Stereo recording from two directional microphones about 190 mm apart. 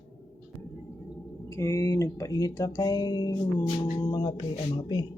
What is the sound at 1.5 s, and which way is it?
Speech, 15° left (ahead or behind).